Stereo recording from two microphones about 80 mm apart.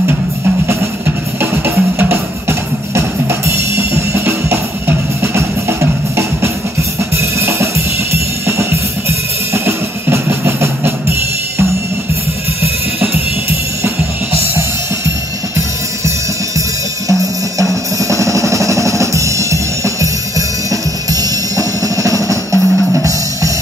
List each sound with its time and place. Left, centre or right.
0.7 s music: right
7.2 s drum kit: right
17.1 s drum: right